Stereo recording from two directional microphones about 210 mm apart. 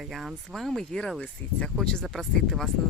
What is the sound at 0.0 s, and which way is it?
Speech, centre (ahead or behind).